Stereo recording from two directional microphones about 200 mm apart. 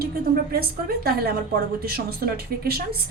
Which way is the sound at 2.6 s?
50° right (ahead or behind).